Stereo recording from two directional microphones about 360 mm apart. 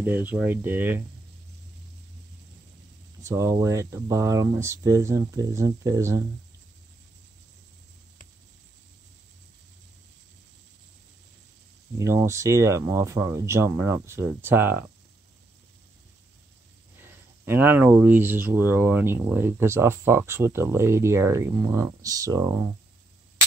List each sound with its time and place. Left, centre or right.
0.0 s speech: centre
3.2 s speech: centre
12.0 s speech: centre
17.5 s speech: centre